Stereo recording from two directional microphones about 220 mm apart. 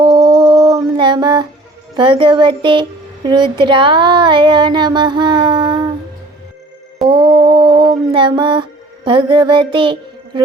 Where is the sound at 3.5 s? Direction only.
20° right (ahead or behind).